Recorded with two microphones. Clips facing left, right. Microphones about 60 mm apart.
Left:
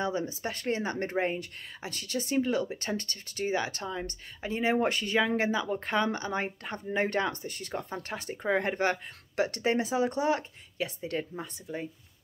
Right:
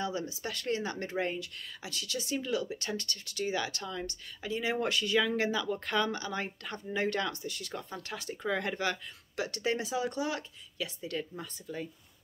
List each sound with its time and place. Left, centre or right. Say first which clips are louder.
0.0 s speech: left 4 dB; left